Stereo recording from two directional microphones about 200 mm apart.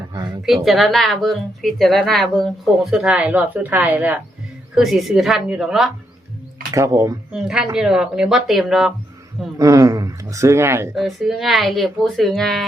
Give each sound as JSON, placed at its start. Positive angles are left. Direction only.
{"t": 0.3, "sound": "speech", "side_deg": 0}
{"t": 6.7, "sound": "speech", "side_deg": -15}
{"t": 7.3, "sound": "speech", "side_deg": 0}
{"t": 9.6, "sound": "speech", "side_deg": -15}
{"t": 10.9, "sound": "speech", "side_deg": 0}